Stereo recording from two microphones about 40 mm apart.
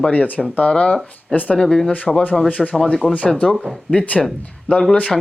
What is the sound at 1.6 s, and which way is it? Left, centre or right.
Speech, left.